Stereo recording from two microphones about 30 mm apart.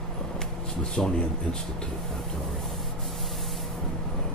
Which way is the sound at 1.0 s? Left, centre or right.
Left.